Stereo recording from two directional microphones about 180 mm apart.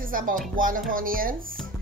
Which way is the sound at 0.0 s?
50° right (ahead or behind).